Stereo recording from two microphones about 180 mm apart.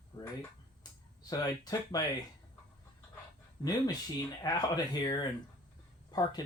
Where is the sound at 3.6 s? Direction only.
20° left (ahead or behind).